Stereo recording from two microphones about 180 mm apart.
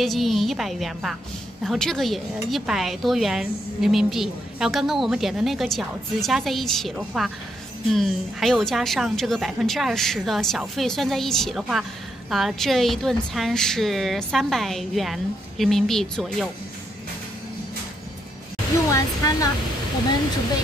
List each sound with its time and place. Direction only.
0.0 s speech: centre (ahead or behind)
18.9 s speech: 20° left (ahead or behind)